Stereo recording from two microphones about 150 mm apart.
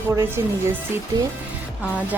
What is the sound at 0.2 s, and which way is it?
Speech, 15° right (ahead or behind).